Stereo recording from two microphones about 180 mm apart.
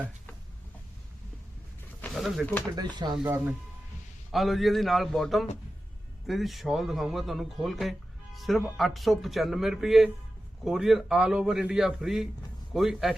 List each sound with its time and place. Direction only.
2.0 s a sound: 5° left (ahead or behind)
2.7 s speech: 25° right (ahead or behind)
3.2 s speech: 10° right (ahead or behind)
4.3 s speech: centre (ahead or behind)